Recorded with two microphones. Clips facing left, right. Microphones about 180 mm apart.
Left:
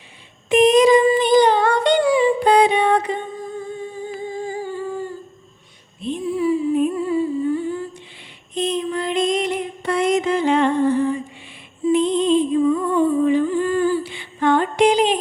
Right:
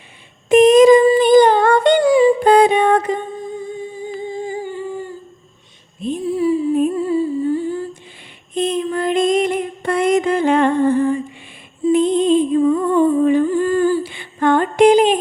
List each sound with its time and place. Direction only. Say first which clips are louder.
0.4 s a sound: right 5 dB; 45° right (ahead or behind)
4.3 s humming: right 1 dB; 20° right (ahead or behind)
6.0 s humming: right 3 dB; 40° right (ahead or behind)
8.5 s female singing: right 3 dB; 50° right (ahead or behind)
11.9 s humming: right 3 dB; 50° right (ahead or behind)